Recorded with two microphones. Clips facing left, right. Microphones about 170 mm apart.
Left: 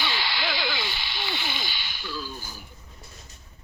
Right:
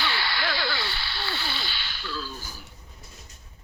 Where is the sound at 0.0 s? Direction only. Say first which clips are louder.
Right 1 dB; 15° left (ahead or behind).